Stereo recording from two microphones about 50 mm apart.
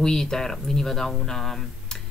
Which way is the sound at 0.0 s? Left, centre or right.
Centre.